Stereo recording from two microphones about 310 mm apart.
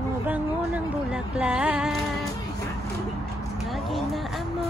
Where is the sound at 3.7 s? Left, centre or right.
Centre.